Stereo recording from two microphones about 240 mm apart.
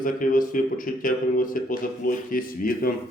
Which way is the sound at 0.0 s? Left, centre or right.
Left.